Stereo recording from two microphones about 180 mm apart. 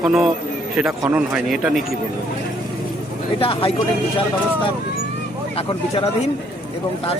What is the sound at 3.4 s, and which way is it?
Speech, 30° left (ahead or behind).